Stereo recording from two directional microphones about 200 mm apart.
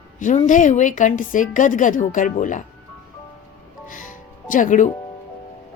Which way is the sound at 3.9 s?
40° left (ahead or behind).